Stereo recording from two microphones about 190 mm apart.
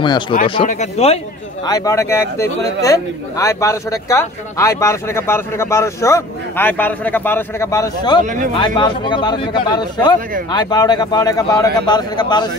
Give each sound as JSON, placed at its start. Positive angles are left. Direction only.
{"t": 0.3, "sound": "speech", "side_deg": 30}
{"t": 1.7, "sound": "a man's voice", "side_deg": 15}